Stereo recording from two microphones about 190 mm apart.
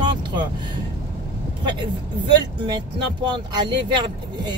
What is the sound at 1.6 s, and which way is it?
Speech, 25° right (ahead or behind).